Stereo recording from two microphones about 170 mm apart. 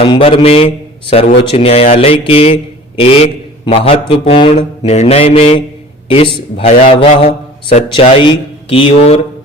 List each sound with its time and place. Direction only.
0.0 s speech: 30° left (ahead or behind)